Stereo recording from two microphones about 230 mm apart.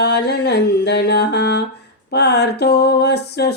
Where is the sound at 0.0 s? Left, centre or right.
Left.